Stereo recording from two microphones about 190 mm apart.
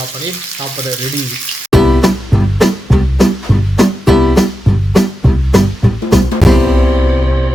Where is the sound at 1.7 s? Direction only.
Centre (ahead or behind).